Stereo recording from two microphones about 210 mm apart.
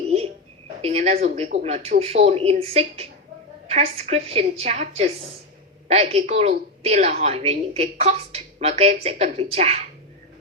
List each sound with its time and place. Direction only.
0.8 s a woman's voice: 30° right (ahead or behind)